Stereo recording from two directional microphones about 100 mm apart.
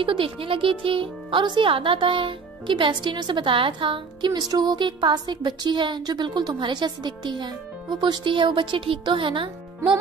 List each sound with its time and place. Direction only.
0.0 s speech: 60° right (ahead or behind)